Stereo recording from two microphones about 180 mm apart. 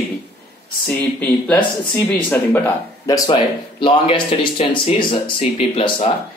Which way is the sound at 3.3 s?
25° left (ahead or behind).